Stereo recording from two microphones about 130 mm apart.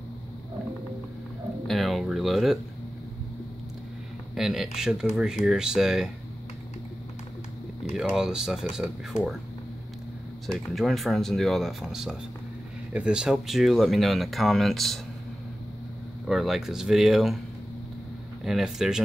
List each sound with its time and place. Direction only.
1.7 s speech: centre (ahead or behind)
4.4 s speech: 5° right (ahead or behind)
7.9 s speech: 5° right (ahead or behind)
10.4 s speech: centre (ahead or behind)
16.3 s speech: centre (ahead or behind)
18.4 s speech: 5° right (ahead or behind)